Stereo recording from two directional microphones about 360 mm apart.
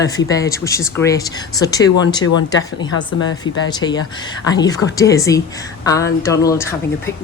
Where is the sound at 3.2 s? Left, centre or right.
Left.